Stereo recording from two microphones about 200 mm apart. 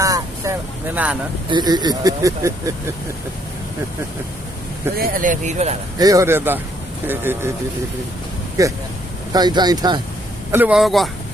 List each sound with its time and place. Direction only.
0.0 s vehicle: 15° right (ahead or behind)
1.5 s speech: 20° right (ahead or behind)
4.9 s speech: 45° right (ahead or behind)
6.0 s speech: 15° right (ahead or behind)
8.6 s speech: 15° right (ahead or behind)
10.5 s speech: 5° right (ahead or behind)